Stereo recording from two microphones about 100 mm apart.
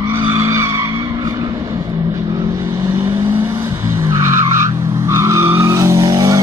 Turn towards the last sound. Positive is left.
turn(degrees=-35)  # may be behind; listen again after turning